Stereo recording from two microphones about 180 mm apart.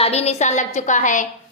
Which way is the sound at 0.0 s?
35° left (ahead or behind).